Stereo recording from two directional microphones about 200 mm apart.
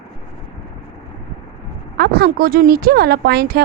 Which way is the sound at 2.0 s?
55° right (ahead or behind).